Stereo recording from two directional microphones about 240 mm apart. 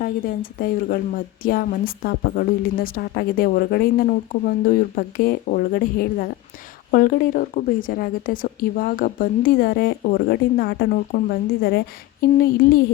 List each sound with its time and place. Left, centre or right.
0.0 s a woman's voice: left